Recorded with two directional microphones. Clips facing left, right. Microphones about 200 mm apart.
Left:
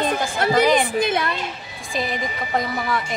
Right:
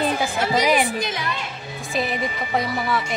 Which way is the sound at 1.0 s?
55° left (ahead or behind).